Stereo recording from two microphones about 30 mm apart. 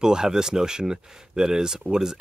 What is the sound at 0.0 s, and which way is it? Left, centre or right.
Speech, right.